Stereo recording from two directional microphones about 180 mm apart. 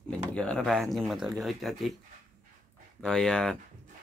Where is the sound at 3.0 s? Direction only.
5° left (ahead or behind).